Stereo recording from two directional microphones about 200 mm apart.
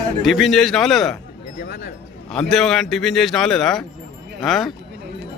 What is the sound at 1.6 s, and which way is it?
Speech, 50° left (ahead or behind).